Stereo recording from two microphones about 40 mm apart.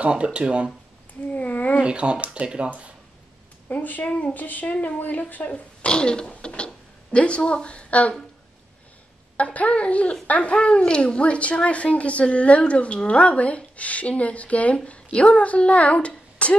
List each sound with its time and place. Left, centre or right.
0.0 s speech: right
1.3 s a woman's voice: left
1.9 s speech: right
3.6 s speech: left
4.0 s a woman's voice: left
5.9 s speech: left
9.4 s a woman's voice: left
10.5 s a child's voice: left
16.1 s a sound: left